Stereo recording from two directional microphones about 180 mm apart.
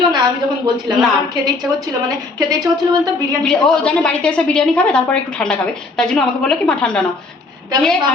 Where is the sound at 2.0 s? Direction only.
20° right (ahead or behind).